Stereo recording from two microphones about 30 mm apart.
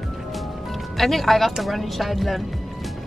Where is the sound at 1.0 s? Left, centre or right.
Centre.